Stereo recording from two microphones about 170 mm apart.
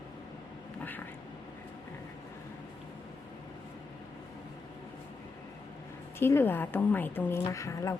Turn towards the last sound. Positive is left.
turn(degrees=20)  # may be behind; listen again after turning